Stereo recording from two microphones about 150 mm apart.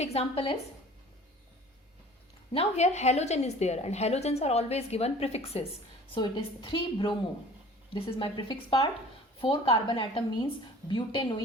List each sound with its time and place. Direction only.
0.0 s a woman's voice: 45° left (ahead or behind)
2.5 s a woman's voice: 45° left (ahead or behind)
6.1 s a woman's voice: 30° left (ahead or behind)